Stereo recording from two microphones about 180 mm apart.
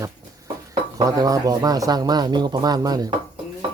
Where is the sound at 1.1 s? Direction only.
20° right (ahead or behind).